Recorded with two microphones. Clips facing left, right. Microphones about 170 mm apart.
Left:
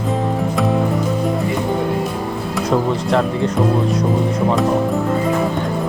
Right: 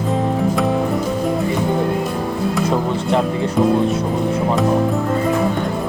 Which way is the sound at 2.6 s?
5° right (ahead or behind).